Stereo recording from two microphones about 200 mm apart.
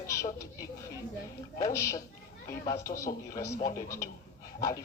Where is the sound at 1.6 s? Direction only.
15° left (ahead or behind).